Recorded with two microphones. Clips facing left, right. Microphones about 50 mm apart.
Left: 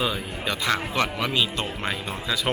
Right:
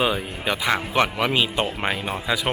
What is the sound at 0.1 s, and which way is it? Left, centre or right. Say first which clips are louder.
Speech: right 4 dB; centre.